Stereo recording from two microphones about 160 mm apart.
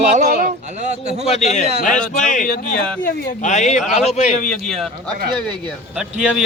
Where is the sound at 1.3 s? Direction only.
45° left (ahead or behind).